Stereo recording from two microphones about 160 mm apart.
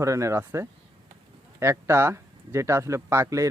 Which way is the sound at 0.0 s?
20° right (ahead or behind).